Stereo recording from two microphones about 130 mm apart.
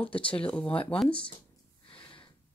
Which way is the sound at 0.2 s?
10° left (ahead or behind).